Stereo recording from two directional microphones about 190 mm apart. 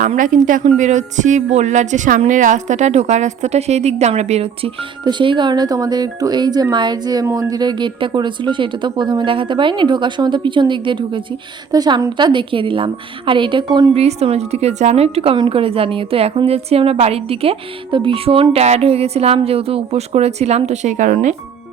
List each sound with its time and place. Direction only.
0.0 s a woman's voice: 45° right (ahead or behind)